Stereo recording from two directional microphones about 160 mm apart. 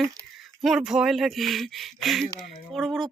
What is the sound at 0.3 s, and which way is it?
Speech, centre (ahead or behind).